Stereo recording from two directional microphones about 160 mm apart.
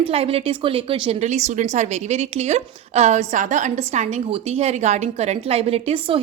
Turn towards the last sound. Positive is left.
turn(degrees=-35)  # may be behind; listen again after turning